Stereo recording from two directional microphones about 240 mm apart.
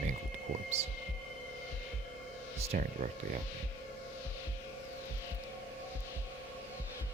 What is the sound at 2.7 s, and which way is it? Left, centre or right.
Speech, right.